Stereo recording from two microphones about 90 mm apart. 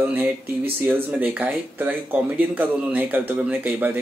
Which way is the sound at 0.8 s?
20° right (ahead or behind).